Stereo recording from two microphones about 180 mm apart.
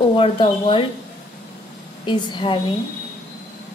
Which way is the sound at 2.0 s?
25° left (ahead or behind).